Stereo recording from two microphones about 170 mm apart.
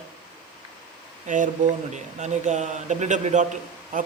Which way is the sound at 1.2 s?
50° right (ahead or behind).